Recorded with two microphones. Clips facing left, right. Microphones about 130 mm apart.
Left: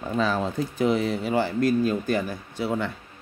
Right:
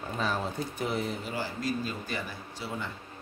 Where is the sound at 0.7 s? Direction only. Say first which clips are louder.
Left 11 dB; 90° left; by 2.7 s 50° left (ahead or behind).